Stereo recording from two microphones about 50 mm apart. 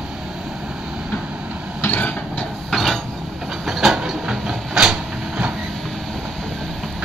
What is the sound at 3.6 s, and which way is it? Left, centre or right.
Train, centre.